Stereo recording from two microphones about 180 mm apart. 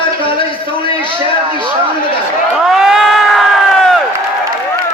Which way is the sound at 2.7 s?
Centre (ahead or behind).